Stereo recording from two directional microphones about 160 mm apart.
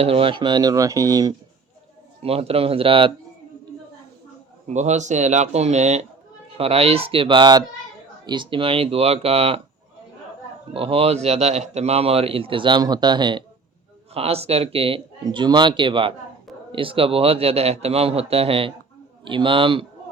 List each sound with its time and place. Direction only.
0.0 s speech: 35° right (ahead or behind)
2.2 s speech: 40° right (ahead or behind)
4.6 s speech: 45° right (ahead or behind)
10.8 s speech: 35° right (ahead or behind)
14.1 s speech: 40° right (ahead or behind)